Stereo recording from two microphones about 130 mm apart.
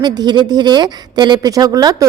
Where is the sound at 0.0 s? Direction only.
35° right (ahead or behind).